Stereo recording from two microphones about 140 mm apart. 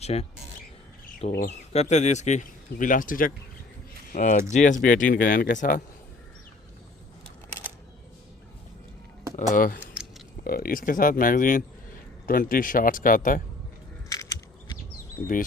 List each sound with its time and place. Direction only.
0.0 s speech: 50° left (ahead or behind)
1.4 s speech: 50° left (ahead or behind); by 3.3 s 80° left
4.1 s speech: 65° left (ahead or behind)
9.6 s speech: 90° left
9.9 s a sound: 5° right (ahead or behind)
10.4 s speech: 90° left; by 13.4 s 75° left (ahead or behind)
14.1 s a sound: 25° left (ahead or behind)
15.2 s speech: 15° left (ahead or behind)